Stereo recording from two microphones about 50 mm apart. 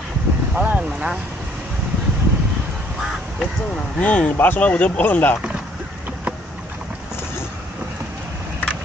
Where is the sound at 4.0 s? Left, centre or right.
Left.